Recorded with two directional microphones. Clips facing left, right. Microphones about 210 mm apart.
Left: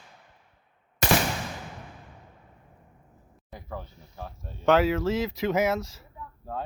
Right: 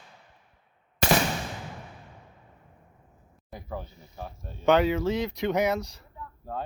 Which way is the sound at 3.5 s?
5° right (ahead or behind).